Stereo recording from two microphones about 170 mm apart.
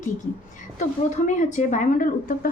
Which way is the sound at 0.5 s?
45° left (ahead or behind).